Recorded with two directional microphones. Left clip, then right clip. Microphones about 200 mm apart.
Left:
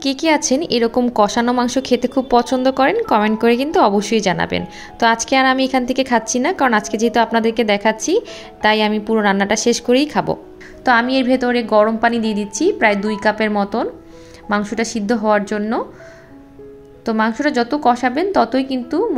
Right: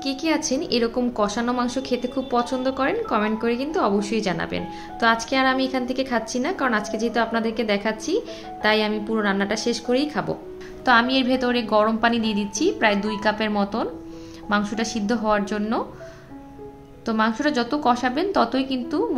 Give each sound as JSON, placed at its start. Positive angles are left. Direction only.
{"t": 0.0, "sound": "a woman's voice", "side_deg": 35}
{"t": 10.9, "sound": "a woman's voice", "side_deg": 20}
{"t": 17.0, "sound": "a woman's voice", "side_deg": 20}